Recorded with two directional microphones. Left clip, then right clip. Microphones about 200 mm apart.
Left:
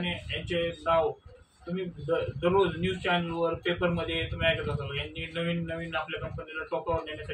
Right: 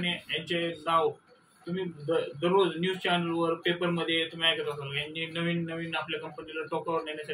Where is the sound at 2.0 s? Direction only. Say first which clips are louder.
Left 1 dB; 10° left (ahead or behind).